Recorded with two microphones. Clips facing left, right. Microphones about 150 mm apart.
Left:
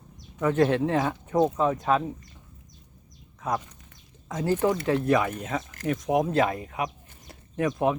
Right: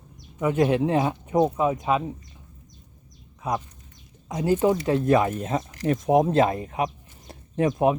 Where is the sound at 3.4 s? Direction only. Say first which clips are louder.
Right 1 dB; 15° right (ahead or behind).